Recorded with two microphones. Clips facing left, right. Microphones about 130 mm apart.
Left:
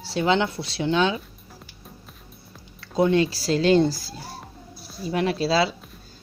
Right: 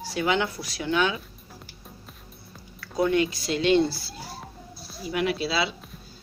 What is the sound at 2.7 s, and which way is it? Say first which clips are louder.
Speech: left 3 dB; 25° left (ahead or behind).